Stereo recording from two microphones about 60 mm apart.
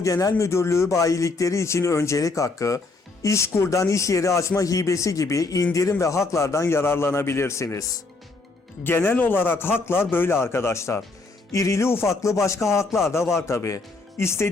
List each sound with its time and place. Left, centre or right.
0.0 s speech: left
3.2 s speech: left
5.9 s a man's voice: left
8.8 s a man's voice: left
11.5 s speech: left
11.9 s a man's voice: left
12.2 s a man's voice: left